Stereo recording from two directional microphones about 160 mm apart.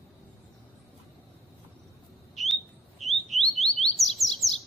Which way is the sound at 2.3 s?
Centre (ahead or behind).